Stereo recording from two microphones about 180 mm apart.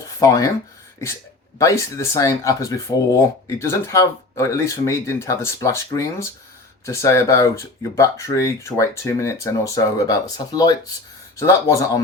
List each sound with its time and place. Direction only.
0.2 s speech: 20° left (ahead or behind)
1.5 s speech: 15° left (ahead or behind)